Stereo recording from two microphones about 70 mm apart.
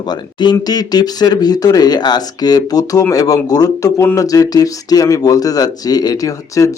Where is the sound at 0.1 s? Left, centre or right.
Left.